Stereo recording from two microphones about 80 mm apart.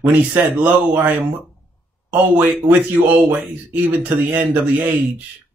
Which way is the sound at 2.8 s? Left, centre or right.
Right.